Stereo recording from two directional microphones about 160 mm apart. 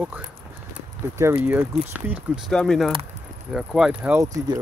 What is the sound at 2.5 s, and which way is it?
Speech, 5° left (ahead or behind).